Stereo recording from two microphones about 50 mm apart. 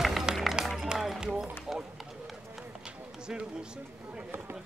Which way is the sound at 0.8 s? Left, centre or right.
Centre.